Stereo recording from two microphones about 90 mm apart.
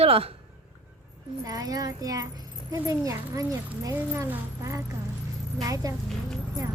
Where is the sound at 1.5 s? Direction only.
40° right (ahead or behind).